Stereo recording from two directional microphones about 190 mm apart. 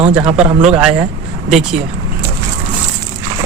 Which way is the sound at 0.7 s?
5° right (ahead or behind).